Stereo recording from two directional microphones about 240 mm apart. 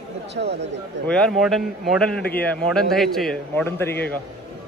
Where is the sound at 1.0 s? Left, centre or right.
Centre.